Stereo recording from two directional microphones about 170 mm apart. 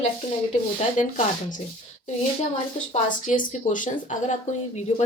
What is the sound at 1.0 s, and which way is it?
Speech, 50° left (ahead or behind).